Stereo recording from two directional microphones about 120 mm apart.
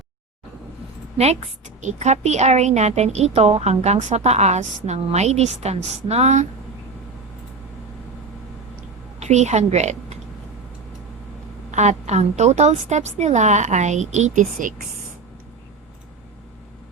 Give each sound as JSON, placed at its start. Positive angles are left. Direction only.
{"t": 1.8, "sound": "a woman's voice", "side_deg": -70}
{"t": 9.2, "sound": "a woman's voice", "side_deg": -70}
{"t": 11.7, "sound": "a woman's voice", "side_deg": -75}